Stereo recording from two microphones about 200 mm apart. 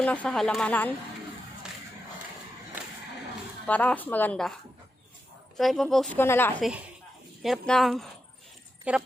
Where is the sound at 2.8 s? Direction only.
10° right (ahead or behind).